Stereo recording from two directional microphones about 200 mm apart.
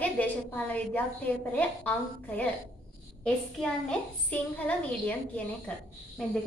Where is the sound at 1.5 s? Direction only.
5° left (ahead or behind).